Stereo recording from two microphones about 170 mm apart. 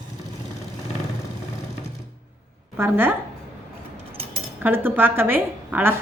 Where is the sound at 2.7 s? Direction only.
15° right (ahead or behind).